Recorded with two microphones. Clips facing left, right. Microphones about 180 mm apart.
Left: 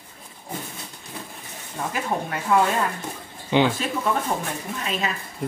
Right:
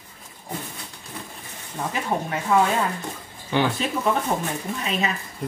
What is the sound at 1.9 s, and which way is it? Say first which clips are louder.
Speech: right 1 dB; centre (ahead or behind).